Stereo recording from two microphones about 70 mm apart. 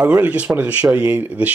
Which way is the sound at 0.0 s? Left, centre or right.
Right.